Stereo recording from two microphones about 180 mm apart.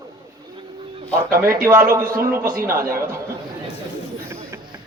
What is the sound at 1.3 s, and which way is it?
Speech, 55° right (ahead or behind).